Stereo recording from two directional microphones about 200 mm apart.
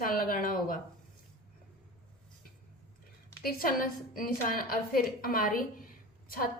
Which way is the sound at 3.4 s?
45° left (ahead or behind).